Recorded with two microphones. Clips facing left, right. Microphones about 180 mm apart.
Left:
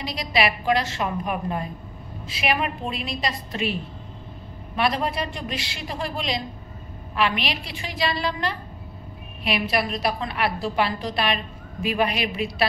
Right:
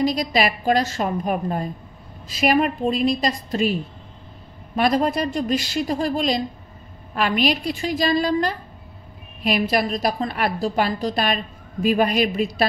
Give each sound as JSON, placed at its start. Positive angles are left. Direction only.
{"t": 0.0, "sound": "a woman's voice", "side_deg": -45}
{"t": 4.7, "sound": "a woman's voice", "side_deg": -45}